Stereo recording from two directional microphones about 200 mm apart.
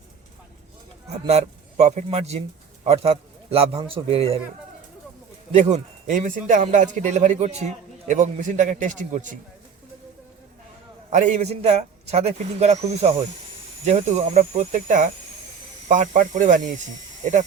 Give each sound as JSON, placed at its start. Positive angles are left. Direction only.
{"t": 1.2, "sound": "a man's voice", "side_deg": -30}
{"t": 5.5, "sound": "a man's voice", "side_deg": -35}
{"t": 11.1, "sound": "a man's voice", "side_deg": -40}